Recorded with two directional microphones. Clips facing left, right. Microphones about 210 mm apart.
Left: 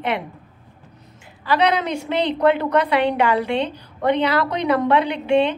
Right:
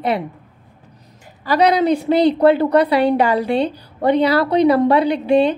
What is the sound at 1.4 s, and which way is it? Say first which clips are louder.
A woman's voice: right 5 dB; 40° right (ahead or behind).